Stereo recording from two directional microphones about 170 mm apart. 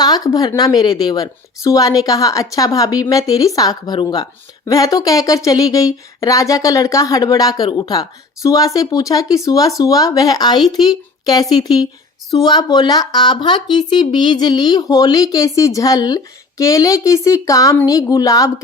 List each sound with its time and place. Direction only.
0.0 s speech: 20° left (ahead or behind)